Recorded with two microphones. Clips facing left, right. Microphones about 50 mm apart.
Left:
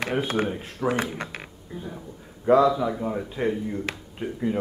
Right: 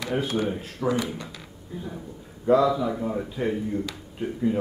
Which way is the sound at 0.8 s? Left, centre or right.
Centre.